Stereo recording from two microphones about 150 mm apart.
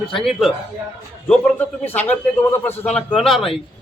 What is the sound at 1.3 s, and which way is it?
A man's voice, 10° left (ahead or behind).